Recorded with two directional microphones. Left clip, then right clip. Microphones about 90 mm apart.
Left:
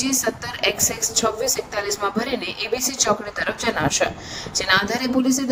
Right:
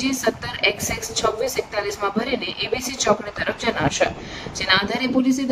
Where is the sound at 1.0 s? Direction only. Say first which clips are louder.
Right 1 dB; 40° left (ahead or behind).